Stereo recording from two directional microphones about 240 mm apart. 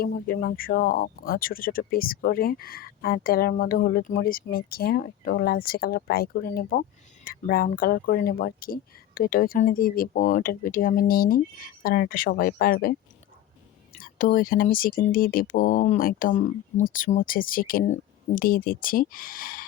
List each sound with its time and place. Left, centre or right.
0.0 s speech: left
14.0 s speech: left